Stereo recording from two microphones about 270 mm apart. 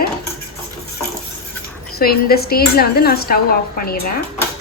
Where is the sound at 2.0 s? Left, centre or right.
Left.